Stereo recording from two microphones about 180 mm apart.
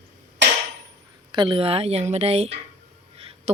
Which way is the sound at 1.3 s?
25° right (ahead or behind).